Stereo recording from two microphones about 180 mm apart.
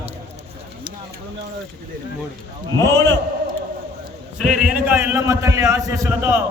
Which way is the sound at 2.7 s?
15° left (ahead or behind).